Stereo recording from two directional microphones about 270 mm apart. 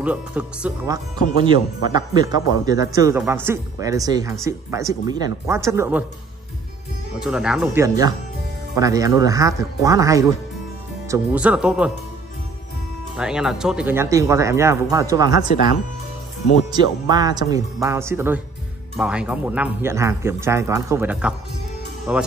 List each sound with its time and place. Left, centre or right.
0.0 s speech: centre
1.4 s speech: centre
7.2 s speech: centre
13.2 s speech: centre
16.7 s speech: centre